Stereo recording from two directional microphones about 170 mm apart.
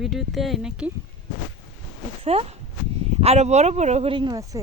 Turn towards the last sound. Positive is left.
turn(degrees=-20)  # may be behind; listen again after turning